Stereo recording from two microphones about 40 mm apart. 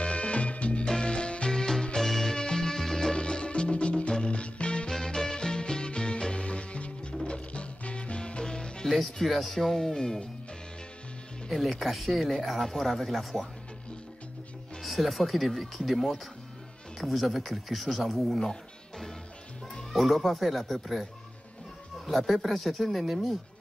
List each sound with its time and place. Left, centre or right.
0.0 s music: left
0.8 s music: left
4.9 s music: centre
8.8 s speech: centre
11.5 s speech: centre
14.8 s speech: centre
19.7 s speech: centre